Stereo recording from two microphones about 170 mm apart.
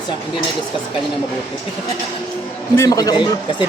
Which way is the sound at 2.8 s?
20° left (ahead or behind).